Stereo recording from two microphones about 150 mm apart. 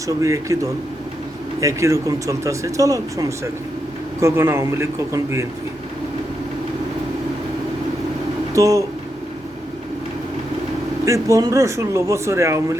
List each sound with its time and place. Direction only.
0.2 s a man's voice: 20° right (ahead or behind)
8.5 s speech: 20° right (ahead or behind)
11.0 s speech: 20° right (ahead or behind)